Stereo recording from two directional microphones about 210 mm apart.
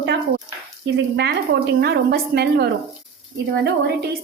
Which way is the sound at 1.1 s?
50° right (ahead or behind).